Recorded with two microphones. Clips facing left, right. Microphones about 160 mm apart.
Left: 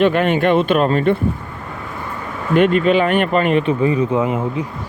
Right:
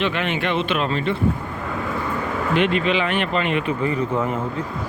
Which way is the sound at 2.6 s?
45° left (ahead or behind).